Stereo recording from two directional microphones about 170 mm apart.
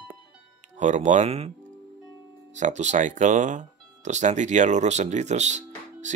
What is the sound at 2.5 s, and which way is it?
Speech, 45° right (ahead or behind).